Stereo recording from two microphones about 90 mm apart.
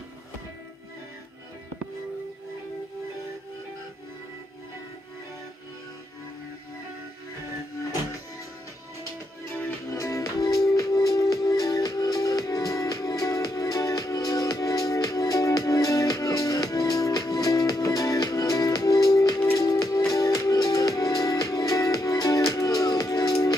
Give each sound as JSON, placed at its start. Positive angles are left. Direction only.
{"t": 9.8, "sound": "music", "side_deg": 35}